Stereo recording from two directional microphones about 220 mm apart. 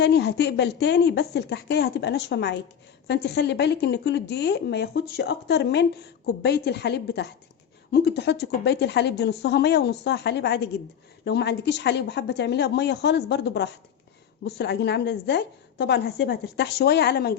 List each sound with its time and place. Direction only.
0.0 s speech: 50° left (ahead or behind)